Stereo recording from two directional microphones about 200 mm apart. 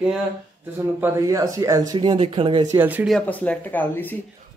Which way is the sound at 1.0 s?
15° right (ahead or behind).